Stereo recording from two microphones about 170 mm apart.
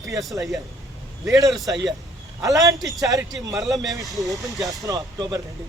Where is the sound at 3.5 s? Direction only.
Centre (ahead or behind).